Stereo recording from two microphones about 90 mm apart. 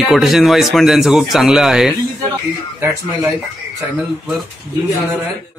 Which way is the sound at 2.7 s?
25° right (ahead or behind).